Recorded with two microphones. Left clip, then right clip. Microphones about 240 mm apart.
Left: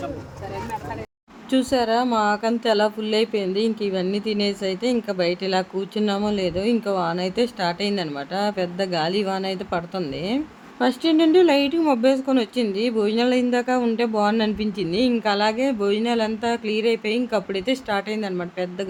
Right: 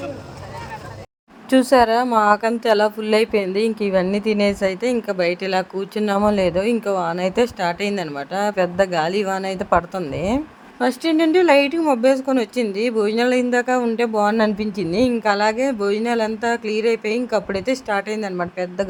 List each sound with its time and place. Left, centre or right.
1.5 s speech: centre